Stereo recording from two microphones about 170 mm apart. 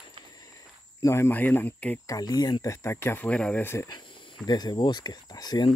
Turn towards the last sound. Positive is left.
turn(degrees=25)  # may be behind; listen again after turning